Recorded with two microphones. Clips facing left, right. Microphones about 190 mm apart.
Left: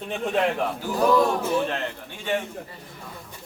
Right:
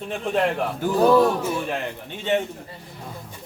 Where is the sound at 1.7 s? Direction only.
15° right (ahead or behind).